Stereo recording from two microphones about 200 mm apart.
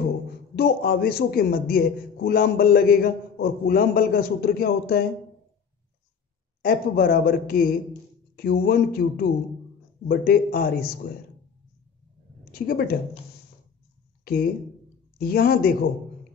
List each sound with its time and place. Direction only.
0.6 s a man's voice: 50° left (ahead or behind)
6.6 s a man's voice: 50° left (ahead or behind)
12.5 s a man's voice: 50° left (ahead or behind)
14.3 s a man's voice: 50° left (ahead or behind)